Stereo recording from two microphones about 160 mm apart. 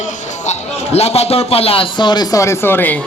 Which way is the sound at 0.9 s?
40° left (ahead or behind).